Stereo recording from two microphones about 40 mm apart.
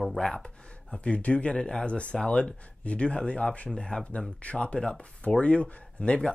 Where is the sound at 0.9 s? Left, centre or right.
Left.